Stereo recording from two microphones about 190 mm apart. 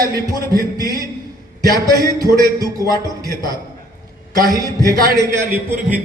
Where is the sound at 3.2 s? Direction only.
20° right (ahead or behind).